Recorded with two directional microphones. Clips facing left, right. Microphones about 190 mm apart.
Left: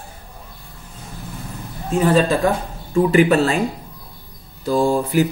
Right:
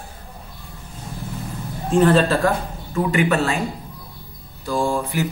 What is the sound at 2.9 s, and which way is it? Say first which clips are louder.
Speech: left 5 dB; 35° left (ahead or behind).